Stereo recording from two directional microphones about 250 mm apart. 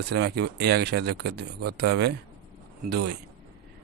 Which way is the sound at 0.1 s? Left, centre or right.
Right.